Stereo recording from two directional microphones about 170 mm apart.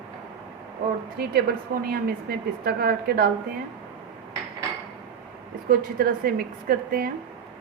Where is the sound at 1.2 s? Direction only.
65° right (ahead or behind).